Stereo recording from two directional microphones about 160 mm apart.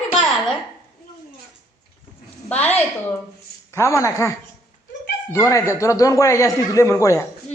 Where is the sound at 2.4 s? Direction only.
10° left (ahead or behind).